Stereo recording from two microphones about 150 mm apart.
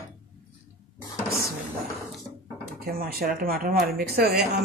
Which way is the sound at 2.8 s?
90° right.